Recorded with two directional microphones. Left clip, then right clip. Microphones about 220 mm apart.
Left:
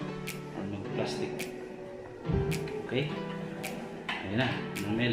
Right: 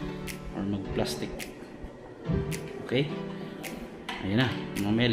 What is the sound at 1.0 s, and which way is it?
Speech, 50° right (ahead or behind).